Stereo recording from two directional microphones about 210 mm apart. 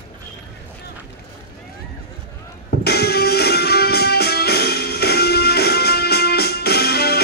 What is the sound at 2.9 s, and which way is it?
Music, 50° left (ahead or behind).